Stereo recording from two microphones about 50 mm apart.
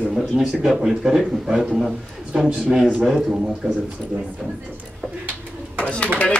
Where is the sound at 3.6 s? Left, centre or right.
Centre.